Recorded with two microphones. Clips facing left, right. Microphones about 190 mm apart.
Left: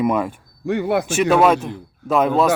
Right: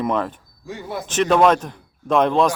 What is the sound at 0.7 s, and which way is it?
Speech, 65° left (ahead or behind).